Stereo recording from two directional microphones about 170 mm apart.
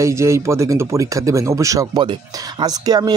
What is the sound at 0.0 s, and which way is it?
A man's voice, 15° right (ahead or behind).